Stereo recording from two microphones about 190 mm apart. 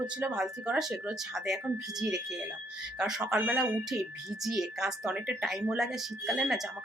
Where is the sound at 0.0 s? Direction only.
5° right (ahead or behind).